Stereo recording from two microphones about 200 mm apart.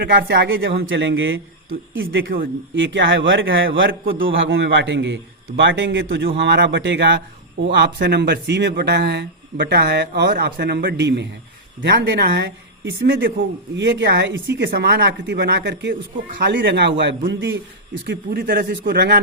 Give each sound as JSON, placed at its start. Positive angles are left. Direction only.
{"t": 0.0, "sound": "speech", "side_deg": -50}
{"t": 0.5, "sound": "speech", "side_deg": -70}
{"t": 2.7, "sound": "speech", "side_deg": -65}